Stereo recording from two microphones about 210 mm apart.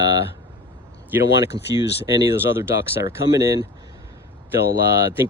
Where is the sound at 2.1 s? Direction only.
20° right (ahead or behind).